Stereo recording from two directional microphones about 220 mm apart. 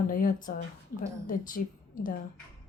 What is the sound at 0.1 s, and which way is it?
A woman's voice, 40° left (ahead or behind).